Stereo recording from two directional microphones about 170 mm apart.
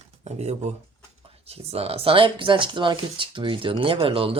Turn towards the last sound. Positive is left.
turn(degrees=-30)  # may be behind; listen again after turning